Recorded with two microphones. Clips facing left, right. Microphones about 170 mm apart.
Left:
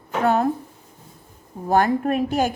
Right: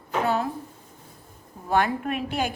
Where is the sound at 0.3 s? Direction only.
50° left (ahead or behind).